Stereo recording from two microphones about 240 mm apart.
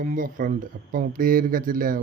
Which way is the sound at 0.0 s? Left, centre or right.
Right.